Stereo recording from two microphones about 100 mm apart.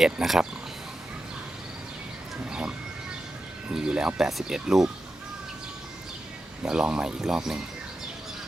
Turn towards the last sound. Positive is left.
turn(degrees=-5)  # may be behind; listen again after turning